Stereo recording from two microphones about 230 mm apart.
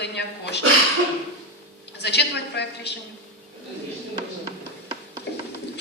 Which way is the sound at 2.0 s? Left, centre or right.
Left.